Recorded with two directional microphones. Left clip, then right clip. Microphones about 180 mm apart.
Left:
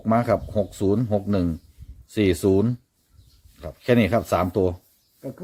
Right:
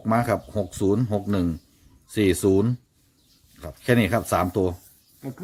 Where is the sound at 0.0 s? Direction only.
5° right (ahead or behind).